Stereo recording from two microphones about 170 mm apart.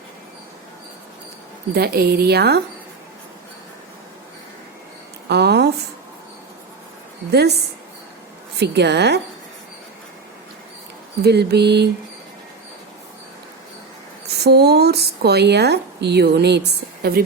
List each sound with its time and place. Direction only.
1.7 s a woman's voice: 65° right (ahead or behind)
5.3 s a sound: 80° right
7.3 s speech: 75° right (ahead or behind)
8.5 s a woman's voice: 80° right
11.2 s a woman's voice: 70° right (ahead or behind)
14.4 s speech: 70° right (ahead or behind)